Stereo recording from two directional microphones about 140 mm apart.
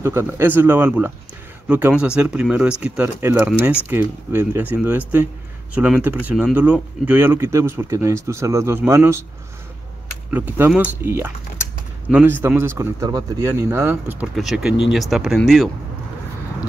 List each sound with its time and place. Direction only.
0.0 s speech: 20° right (ahead or behind)
10.3 s speech: 10° right (ahead or behind)
14.2 s speech: centre (ahead or behind)